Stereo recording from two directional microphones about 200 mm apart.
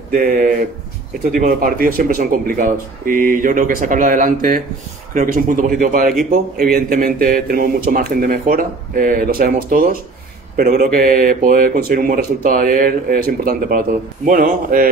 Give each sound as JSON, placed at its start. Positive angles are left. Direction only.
{"t": 0.1, "sound": "speech", "side_deg": -45}